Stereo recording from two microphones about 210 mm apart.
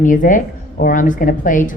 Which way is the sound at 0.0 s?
40° left (ahead or behind).